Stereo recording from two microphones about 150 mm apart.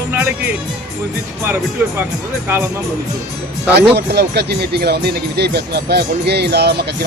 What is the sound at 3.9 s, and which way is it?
Speech, 90° right.